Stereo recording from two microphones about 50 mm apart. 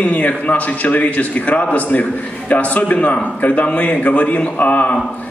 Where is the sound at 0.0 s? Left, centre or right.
Left.